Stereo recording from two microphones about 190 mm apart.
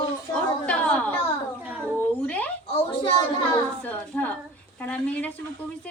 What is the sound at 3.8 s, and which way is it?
Speech, 10° left (ahead or behind).